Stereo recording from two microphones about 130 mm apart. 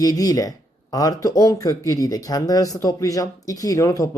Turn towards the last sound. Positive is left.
turn(degrees=25)  # may be behind; listen again after turning